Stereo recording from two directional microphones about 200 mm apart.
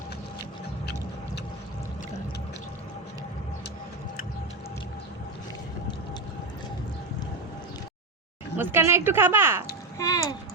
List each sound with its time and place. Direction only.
8.5 s speech: 10° right (ahead or behind)
10.0 s a child's voice: 15° left (ahead or behind)